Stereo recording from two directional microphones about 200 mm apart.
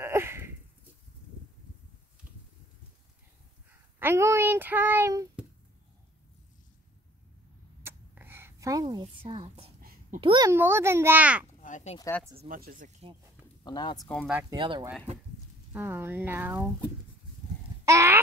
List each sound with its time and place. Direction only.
0.0 s a sound: 10° right (ahead or behind)
4.0 s a child's voice: 15° right (ahead or behind)
7.8 s a sound: 10° right (ahead or behind)
9.0 s speech: 30° right (ahead or behind)
9.8 s a sound: 45° right (ahead or behind)
10.2 s speech: 25° right (ahead or behind)
10.5 s a child's voice: 10° right (ahead or behind)
11.6 s speech: 35° left (ahead or behind)
12.4 s speech: 45° right (ahead or behind)
13.7 s speech: 20° left (ahead or behind)
14.1 s a child's voice: 5° right (ahead or behind)
14.5 s speech: 20° right (ahead or behind)
15.7 s a child's voice: 10° right (ahead or behind)
17.8 s a sound: 15° right (ahead or behind)